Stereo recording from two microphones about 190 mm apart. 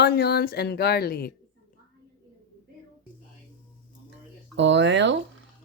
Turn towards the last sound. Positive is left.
turn(degrees=-70)  # may be behind; listen again after turning